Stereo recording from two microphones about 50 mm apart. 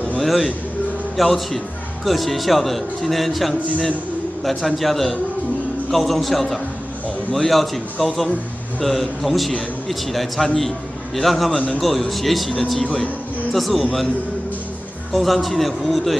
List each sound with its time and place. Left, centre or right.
0.2 s a man's voice: centre
15.1 s a man's voice: centre